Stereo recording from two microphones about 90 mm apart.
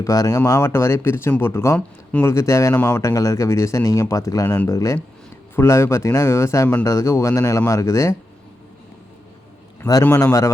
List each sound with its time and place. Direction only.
0.0 s speech: 40° left (ahead or behind)
2.7 s speech: 20° left (ahead or behind)
3.0 s speech: 40° left (ahead or behind)
4.4 s speech: 20° left (ahead or behind)
4.7 s speech: 35° left (ahead or behind)
10.0 s speech: 25° left (ahead or behind)